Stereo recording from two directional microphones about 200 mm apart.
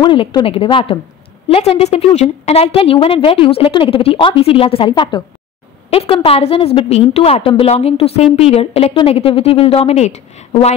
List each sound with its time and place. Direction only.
0.0 s a woman's voice: 25° left (ahead or behind)